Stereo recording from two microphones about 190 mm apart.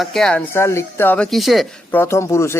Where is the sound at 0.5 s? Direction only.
15° left (ahead or behind).